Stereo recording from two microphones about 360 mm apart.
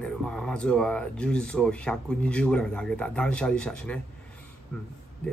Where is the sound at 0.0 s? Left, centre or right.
Centre.